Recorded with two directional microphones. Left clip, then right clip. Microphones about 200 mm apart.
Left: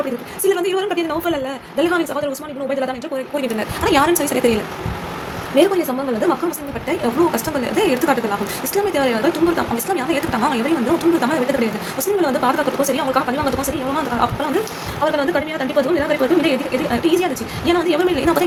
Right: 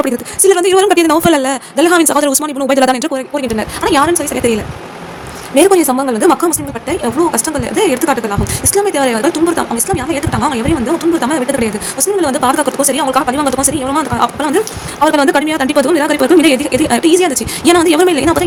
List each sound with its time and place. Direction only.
0.0 s a woman's voice: 40° right (ahead or behind); by 3.1 s 55° right (ahead or behind)
3.3 s a woman's voice: 30° right (ahead or behind)
5.5 s speech: 40° right (ahead or behind)
6.8 s speech: 30° right (ahead or behind)